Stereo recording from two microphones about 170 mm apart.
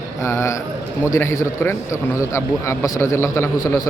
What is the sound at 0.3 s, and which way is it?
A man's voice, 15° left (ahead or behind).